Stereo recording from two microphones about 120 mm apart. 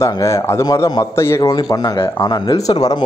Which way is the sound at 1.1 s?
20° left (ahead or behind).